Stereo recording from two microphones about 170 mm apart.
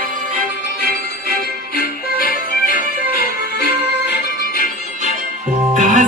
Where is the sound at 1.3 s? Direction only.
65° left (ahead or behind).